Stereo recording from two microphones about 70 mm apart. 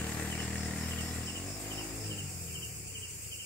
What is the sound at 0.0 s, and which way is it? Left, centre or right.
Vehicle, centre.